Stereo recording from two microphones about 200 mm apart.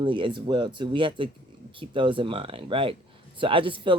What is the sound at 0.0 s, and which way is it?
Speech, 25° right (ahead or behind).